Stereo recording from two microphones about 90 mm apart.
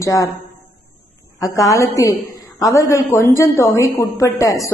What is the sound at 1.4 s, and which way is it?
A woman's voice, 40° left (ahead or behind).